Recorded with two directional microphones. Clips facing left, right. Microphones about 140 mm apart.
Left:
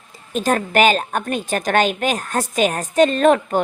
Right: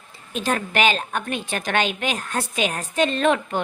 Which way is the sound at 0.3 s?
45° left (ahead or behind).